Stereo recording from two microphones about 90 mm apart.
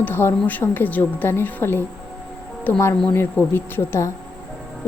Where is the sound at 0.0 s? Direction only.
25° left (ahead or behind).